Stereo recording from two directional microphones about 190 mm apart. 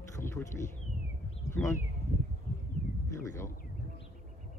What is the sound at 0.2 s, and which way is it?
Speech, 15° left (ahead or behind).